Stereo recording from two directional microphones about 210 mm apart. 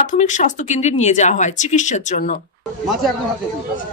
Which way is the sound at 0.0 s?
35° left (ahead or behind).